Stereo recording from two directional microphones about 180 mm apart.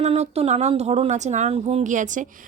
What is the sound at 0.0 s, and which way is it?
Speech, 35° right (ahead or behind).